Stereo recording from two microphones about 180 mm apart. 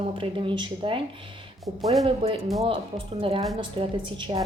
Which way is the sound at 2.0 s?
30° right (ahead or behind).